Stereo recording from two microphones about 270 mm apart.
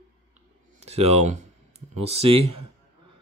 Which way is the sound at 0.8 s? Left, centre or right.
Right.